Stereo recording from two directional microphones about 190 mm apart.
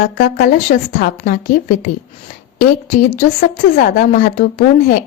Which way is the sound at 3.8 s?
50° left (ahead or behind).